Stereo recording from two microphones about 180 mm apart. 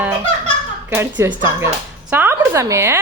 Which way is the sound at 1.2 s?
15° right (ahead or behind).